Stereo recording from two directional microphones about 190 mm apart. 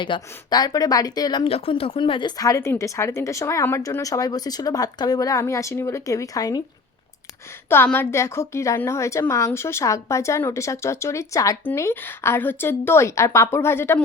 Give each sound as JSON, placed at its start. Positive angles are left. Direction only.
{"t": 0.0, "sound": "speech", "side_deg": 25}
{"t": 7.7, "sound": "a woman's voice", "side_deg": 10}